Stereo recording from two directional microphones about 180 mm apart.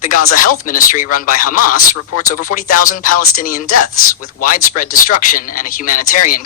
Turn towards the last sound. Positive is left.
turn(degrees=50)  # may be behind; listen again after turning